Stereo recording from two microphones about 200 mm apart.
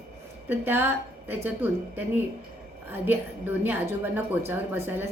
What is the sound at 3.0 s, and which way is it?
A woman's voice, 10° right (ahead or behind).